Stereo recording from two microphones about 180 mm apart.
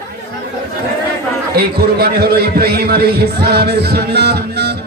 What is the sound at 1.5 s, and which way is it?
A man's voice, 60° right (ahead or behind).